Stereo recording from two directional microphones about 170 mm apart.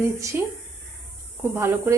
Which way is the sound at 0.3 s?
10° right (ahead or behind).